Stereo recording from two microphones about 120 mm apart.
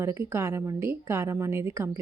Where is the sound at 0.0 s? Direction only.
20° right (ahead or behind).